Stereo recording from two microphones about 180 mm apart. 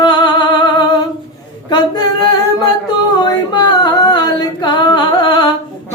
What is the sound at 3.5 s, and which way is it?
Singing, 25° left (ahead or behind).